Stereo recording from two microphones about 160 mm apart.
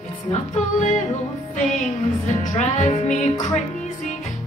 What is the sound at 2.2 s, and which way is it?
Music, 50° left (ahead or behind).